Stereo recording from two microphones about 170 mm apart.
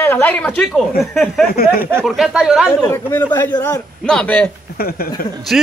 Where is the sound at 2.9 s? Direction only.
15° left (ahead or behind).